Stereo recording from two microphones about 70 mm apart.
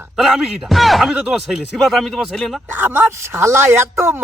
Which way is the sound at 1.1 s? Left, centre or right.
Centre.